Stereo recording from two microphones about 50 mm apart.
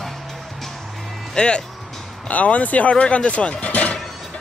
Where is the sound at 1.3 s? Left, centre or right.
Centre.